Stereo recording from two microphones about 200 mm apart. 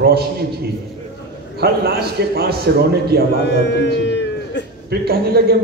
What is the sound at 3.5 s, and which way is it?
A man's voice, 60° left (ahead or behind).